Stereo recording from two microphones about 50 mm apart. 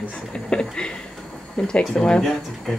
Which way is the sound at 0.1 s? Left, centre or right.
Centre.